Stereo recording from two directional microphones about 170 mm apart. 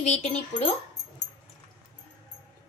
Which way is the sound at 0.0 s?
40° left (ahead or behind).